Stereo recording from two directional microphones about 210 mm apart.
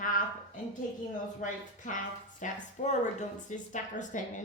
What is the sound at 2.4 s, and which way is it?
A woman's voice, 35° left (ahead or behind).